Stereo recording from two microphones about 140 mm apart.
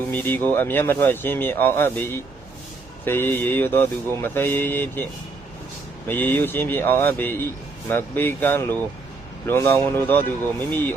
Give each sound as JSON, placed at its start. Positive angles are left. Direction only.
{"t": 0.1, "sound": "speech", "side_deg": 15}
{"t": 6.1, "sound": "speech", "side_deg": 15}